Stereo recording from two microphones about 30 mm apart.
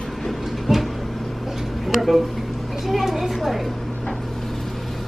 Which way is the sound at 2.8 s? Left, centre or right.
Centre.